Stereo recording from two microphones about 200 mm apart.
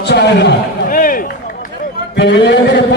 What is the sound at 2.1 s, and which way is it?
Mantra, 65° left (ahead or behind).